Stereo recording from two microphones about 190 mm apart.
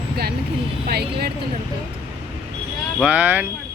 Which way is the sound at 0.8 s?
55° right (ahead or behind).